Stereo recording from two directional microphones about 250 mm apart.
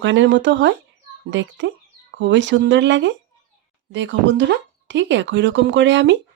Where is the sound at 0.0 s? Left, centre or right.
Right.